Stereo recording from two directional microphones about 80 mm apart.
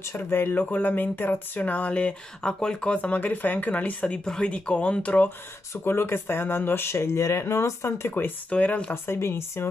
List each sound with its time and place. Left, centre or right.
0.1 s speech: left
5.9 s speech: left
8.5 s speech: centre
8.9 s speech: left